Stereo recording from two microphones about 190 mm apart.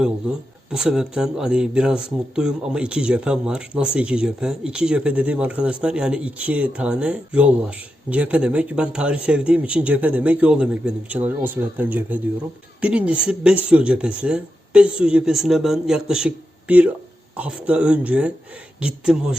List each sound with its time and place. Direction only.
0.7 s speech: 5° right (ahead or behind)